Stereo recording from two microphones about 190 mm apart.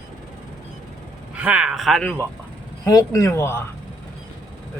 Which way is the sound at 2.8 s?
20° left (ahead or behind).